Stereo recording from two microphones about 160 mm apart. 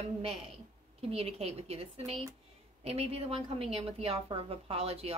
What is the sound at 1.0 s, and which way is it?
A woman's voice, 40° right (ahead or behind).